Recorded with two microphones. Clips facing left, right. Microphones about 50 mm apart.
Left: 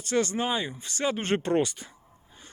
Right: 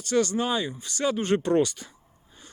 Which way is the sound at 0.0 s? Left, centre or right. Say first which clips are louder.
Right 2 dB; left.